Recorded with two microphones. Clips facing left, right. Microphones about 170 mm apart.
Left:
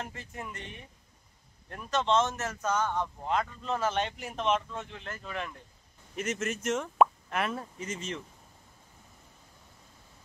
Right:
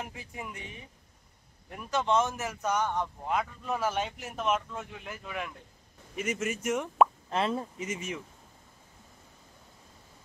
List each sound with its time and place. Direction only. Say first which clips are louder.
0.0 s a man's voice: even; 10° right (ahead or behind)
7.2 s speech: right 3 dB; 25° right (ahead or behind)